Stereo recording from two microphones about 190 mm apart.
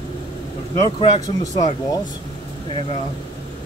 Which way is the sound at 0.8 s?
30° left (ahead or behind).